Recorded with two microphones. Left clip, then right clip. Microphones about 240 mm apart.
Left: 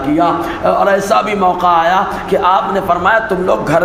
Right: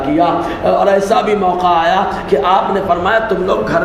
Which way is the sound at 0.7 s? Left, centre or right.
Left.